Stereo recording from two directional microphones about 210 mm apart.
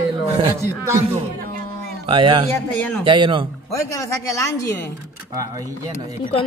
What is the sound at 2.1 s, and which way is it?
Speech, 25° right (ahead or behind).